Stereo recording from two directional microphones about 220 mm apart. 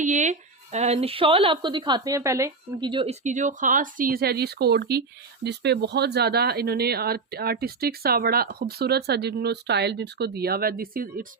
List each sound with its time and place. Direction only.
0.0 s speech: 35° right (ahead or behind)